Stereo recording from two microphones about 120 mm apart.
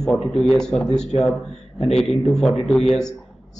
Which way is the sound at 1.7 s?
60° left (ahead or behind).